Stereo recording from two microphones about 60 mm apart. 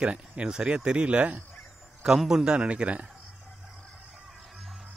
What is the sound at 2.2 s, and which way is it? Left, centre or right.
Speech, centre.